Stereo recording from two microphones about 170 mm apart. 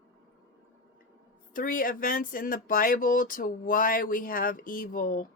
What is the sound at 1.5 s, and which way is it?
Speech, 55° left (ahead or behind).